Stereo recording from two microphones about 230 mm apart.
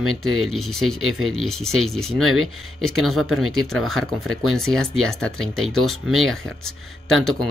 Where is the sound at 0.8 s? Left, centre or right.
Right.